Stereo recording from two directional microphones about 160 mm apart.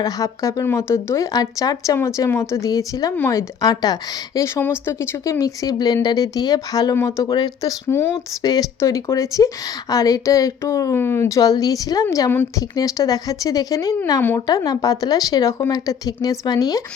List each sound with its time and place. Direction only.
0.0 s a woman's voice: 20° left (ahead or behind)